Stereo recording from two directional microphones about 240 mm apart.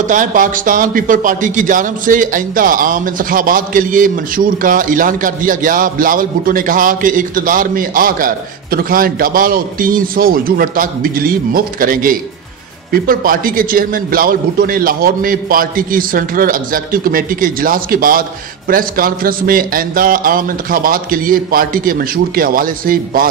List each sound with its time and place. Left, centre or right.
0.0 s a man's voice: right